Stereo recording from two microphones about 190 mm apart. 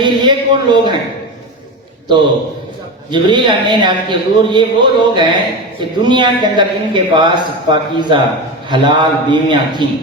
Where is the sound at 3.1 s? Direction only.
25° right (ahead or behind).